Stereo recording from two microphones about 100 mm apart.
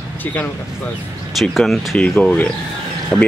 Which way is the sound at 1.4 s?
Centre (ahead or behind).